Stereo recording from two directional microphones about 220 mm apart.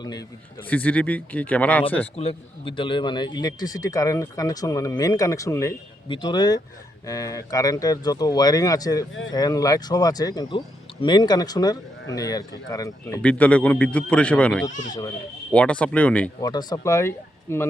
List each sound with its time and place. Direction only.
0.0 s a man's voice: 20° left (ahead or behind)
0.7 s a man's voice: 5° left (ahead or behind)
2.1 s a man's voice: 25° left (ahead or behind); by 16.3 s 5° left (ahead or behind)
16.4 s a man's voice: 20° left (ahead or behind)